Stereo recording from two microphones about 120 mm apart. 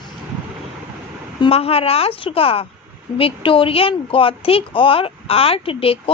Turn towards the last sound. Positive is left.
turn(degrees=50)  # may be behind; listen again after turning